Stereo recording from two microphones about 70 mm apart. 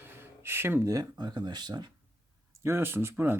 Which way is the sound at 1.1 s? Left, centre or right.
Right.